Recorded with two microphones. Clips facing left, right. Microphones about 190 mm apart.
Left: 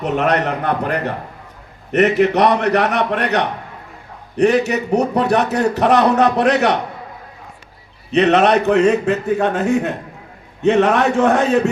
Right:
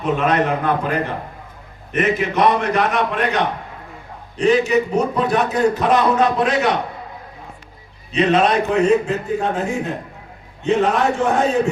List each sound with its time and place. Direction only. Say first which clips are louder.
0.0 s a man's voice: left 1 dB; 70° left (ahead or behind)
8.1 s a man's voice: left 3 dB; 70° left (ahead or behind)